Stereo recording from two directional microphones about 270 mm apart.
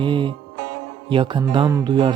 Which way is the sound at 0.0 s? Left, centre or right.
Centre.